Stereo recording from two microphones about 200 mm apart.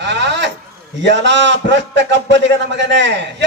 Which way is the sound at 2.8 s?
60° right (ahead or behind).